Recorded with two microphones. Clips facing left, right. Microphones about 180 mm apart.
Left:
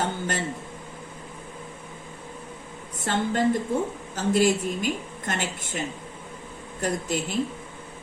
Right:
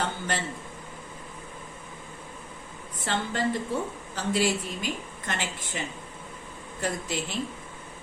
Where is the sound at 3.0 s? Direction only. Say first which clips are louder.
Left 5 dB; 50° left (ahead or behind).